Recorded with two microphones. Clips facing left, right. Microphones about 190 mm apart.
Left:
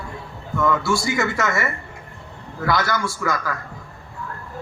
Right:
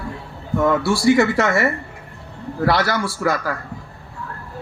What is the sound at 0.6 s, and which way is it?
Speech, 35° right (ahead or behind).